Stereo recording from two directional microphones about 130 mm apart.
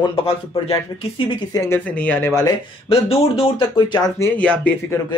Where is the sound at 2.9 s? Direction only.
45° left (ahead or behind).